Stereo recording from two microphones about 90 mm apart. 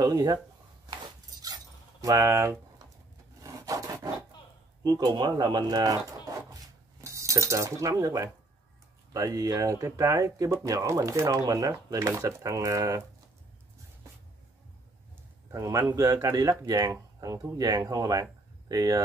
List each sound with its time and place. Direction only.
0.0 s speech: 45° right (ahead or behind)
2.0 s speech: 35° right (ahead or behind)
3.4 s wood: 40° right (ahead or behind)
4.8 s speech: 45° right (ahead or behind)
6.5 s cutlery: 35° right (ahead or behind)
9.1 s speech: 40° right (ahead or behind)
15.5 s speech: 35° right (ahead or behind)